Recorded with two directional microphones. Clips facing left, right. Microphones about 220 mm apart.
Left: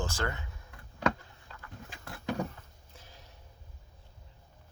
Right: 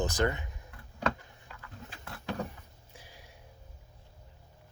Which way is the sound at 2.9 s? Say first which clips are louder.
Right 1 dB; 10° right (ahead or behind).